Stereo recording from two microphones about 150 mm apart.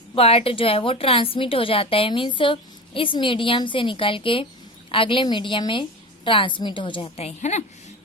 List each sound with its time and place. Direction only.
0.2 s a woman's voice: 40° left (ahead or behind)